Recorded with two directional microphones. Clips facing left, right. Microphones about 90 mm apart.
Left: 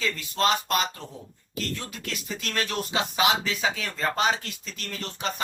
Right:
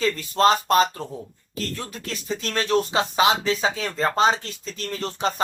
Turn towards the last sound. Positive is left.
turn(degrees=-35)  # may be behind; listen again after turning